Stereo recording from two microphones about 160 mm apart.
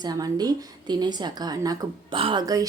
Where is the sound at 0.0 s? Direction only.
25° right (ahead or behind).